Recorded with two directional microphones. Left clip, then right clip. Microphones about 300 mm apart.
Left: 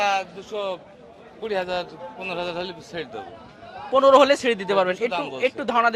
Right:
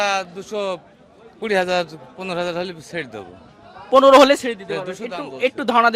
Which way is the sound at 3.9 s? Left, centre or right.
Right.